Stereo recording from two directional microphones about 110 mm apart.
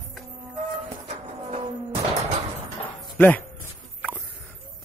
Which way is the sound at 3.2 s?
15° left (ahead or behind).